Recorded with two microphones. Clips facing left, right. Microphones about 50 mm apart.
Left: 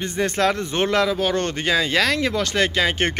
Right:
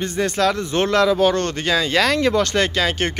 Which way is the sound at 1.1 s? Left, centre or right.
Centre.